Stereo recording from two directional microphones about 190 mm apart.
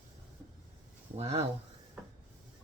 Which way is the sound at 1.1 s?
35° right (ahead or behind).